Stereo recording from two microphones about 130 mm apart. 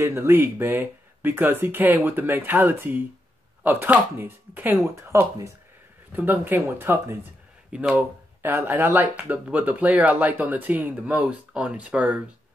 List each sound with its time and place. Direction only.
0.0 s speech: 20° right (ahead or behind)